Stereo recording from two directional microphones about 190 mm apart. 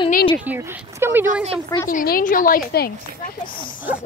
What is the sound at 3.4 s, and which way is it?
Speech, 25° left (ahead or behind).